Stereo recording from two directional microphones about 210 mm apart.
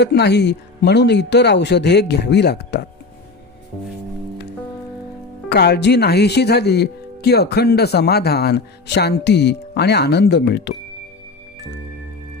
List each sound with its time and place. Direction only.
0.0 s speech: 55° left (ahead or behind)
5.5 s speech: 50° left (ahead or behind)